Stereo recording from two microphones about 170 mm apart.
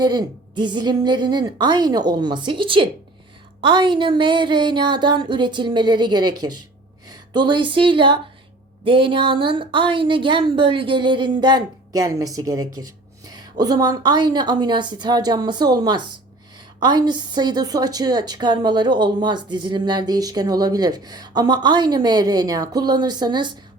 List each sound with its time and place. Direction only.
0.0 s a woman's voice: 25° right (ahead or behind)